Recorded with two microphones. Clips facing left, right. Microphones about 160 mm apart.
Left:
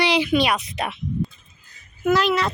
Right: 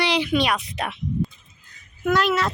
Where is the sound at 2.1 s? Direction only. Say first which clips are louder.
Left 1 dB; centre (ahead or behind).